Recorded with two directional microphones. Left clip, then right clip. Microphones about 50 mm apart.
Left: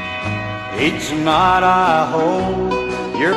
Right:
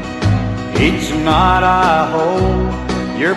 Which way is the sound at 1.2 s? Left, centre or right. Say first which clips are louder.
Right 1 dB; left.